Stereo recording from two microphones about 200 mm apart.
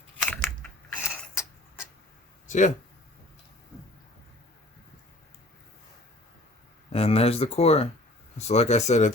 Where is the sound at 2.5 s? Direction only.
35° left (ahead or behind).